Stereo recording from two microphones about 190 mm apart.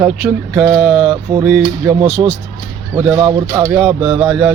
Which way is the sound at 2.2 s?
25° right (ahead or behind).